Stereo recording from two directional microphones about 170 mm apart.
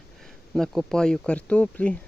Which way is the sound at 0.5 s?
Centre (ahead or behind).